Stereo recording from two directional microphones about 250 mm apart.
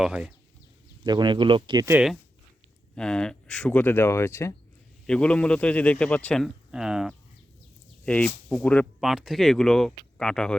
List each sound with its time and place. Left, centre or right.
0.0 s a man's voice: centre
1.0 s a man's voice: centre